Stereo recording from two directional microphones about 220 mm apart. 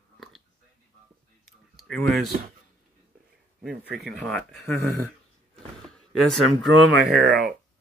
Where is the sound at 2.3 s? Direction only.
35° right (ahead or behind).